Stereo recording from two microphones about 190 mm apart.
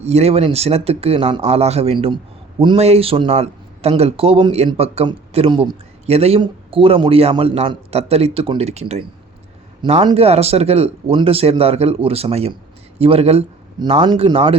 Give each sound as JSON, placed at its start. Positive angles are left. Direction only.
{"t": 0.0, "sound": "a man's voice", "side_deg": -35}